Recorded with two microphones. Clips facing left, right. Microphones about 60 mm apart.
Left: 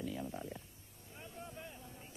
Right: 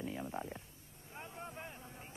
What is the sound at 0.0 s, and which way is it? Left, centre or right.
Stomach rumble, right.